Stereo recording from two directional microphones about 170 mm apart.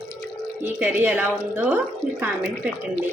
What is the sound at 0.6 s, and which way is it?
Speech, 10° right (ahead or behind).